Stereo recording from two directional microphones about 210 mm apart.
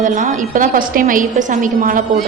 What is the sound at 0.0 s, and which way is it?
A woman's voice, 40° right (ahead or behind).